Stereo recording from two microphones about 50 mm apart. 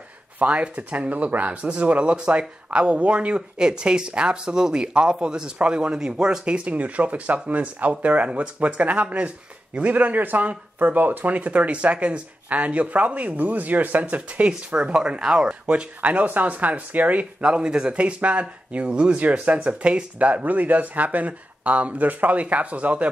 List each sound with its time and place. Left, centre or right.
0.4 s speech: right
17.4 s speech: centre